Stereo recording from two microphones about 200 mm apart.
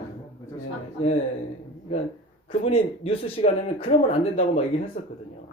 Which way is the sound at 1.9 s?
30° left (ahead or behind).